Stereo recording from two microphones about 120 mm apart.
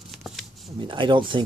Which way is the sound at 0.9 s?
40° right (ahead or behind).